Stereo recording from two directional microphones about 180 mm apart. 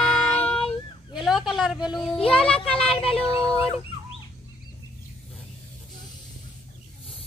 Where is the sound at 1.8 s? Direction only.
Centre (ahead or behind).